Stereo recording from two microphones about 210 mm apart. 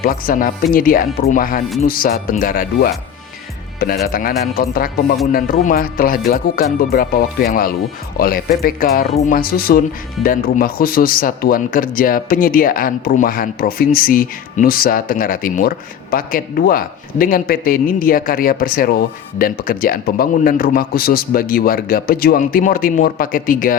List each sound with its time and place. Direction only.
0.0 s speech: 45° left (ahead or behind)
4.0 s speech: 45° left (ahead or behind)